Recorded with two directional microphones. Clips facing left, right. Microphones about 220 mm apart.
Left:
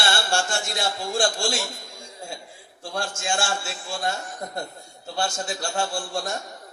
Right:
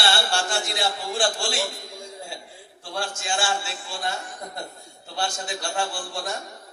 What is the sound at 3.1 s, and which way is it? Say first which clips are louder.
Speech: left 4 dB; 45° left (ahead or behind).